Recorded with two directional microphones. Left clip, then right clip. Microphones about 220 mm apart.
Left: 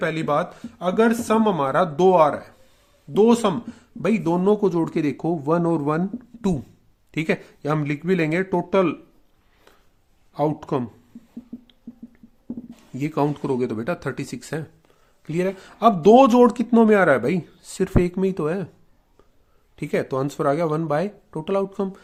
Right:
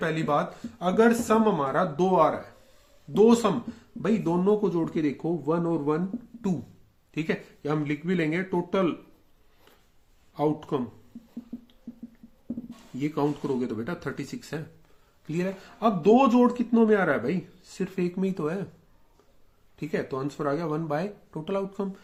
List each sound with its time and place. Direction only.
0.0 s speech: 30° left (ahead or behind)
3.1 s speech: 30° left (ahead or behind); by 6.0 s 45° left (ahead or behind)
7.1 s speech: 40° left (ahead or behind)
10.3 s speech: 40° left (ahead or behind)
13.0 s speech: 40° left (ahead or behind)
19.7 s speech: 35° left (ahead or behind)